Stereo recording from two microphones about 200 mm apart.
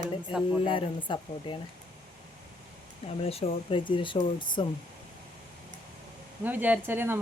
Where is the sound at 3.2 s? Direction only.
30° left (ahead or behind).